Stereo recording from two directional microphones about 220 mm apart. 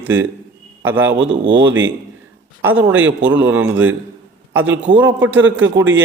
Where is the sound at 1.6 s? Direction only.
60° right (ahead or behind).